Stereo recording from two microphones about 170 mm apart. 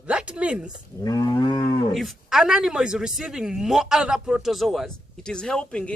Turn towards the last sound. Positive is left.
turn(degrees=5)  # may be behind; listen again after turning